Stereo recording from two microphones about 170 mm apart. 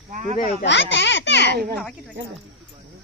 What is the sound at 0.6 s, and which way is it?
Speech, 90° left.